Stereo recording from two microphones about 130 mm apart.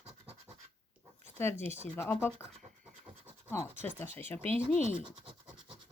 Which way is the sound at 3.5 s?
15° left (ahead or behind).